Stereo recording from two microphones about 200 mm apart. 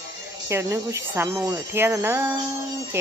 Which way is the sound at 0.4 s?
15° right (ahead or behind).